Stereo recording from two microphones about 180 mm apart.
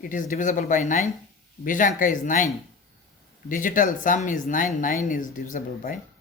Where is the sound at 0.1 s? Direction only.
45° left (ahead or behind).